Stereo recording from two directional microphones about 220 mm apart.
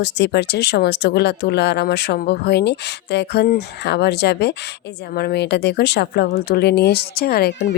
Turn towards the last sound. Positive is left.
turn(degrees=45)  # may be behind; listen again after turning